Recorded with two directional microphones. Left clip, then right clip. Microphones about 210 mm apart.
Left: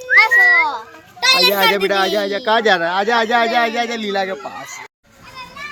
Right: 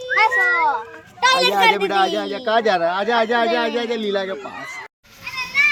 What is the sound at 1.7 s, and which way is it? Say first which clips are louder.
Speech: left 2 dB; 30° left (ahead or behind).